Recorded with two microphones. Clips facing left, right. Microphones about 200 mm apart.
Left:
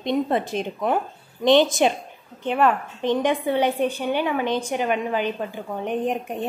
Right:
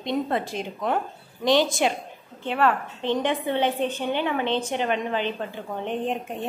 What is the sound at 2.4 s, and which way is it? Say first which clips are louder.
A woman's voice: left 3 dB; 15° left (ahead or behind).